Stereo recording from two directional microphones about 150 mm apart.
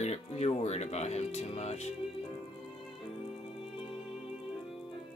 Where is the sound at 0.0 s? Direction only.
45° left (ahead or behind).